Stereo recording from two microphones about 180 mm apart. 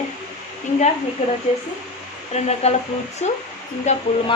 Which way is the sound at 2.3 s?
35° left (ahead or behind).